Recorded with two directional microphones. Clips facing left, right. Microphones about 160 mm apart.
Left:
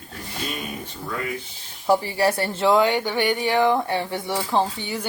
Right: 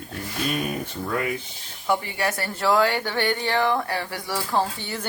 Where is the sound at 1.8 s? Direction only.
30° left (ahead or behind); by 5.0 s 15° left (ahead or behind).